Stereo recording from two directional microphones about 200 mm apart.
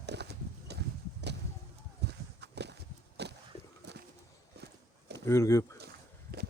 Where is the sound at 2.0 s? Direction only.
60° right (ahead or behind).